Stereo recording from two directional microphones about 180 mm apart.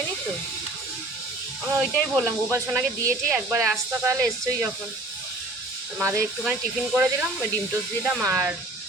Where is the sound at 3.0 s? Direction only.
15° right (ahead or behind).